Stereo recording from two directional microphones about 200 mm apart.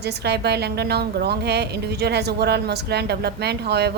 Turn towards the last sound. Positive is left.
turn(degrees=-55)  # may be behind; listen again after turning